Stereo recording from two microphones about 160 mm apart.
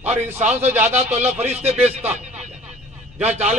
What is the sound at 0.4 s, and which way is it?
A man's voice, 45° right (ahead or behind).